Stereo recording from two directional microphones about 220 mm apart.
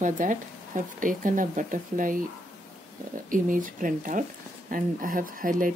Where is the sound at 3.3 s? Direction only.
40° right (ahead or behind).